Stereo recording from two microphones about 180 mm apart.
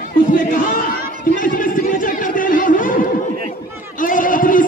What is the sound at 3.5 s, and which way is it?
Chatter, 50° left (ahead or behind).